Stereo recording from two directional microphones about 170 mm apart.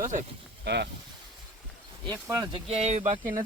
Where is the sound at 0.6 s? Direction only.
80° right.